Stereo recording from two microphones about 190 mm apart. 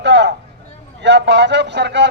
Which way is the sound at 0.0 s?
65° right (ahead or behind).